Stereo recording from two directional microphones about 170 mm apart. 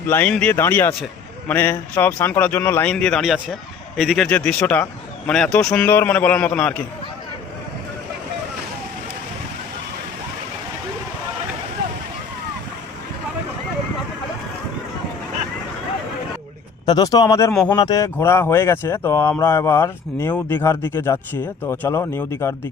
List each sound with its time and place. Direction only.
0.1 s speech: 10° left (ahead or behind)
4.3 s speech: 10° left (ahead or behind)
16.8 s speech: 20° left (ahead or behind)
17.5 s speech: 5° left (ahead or behind)
17.7 s speech: 20° left (ahead or behind)